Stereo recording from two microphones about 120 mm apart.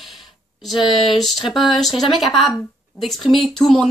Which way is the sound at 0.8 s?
40° left (ahead or behind).